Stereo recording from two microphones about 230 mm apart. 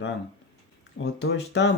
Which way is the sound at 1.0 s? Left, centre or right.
Left.